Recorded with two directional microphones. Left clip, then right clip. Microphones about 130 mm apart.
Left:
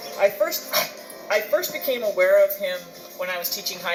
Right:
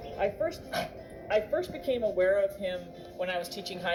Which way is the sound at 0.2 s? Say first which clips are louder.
Left 10 dB; 35° right (ahead or behind).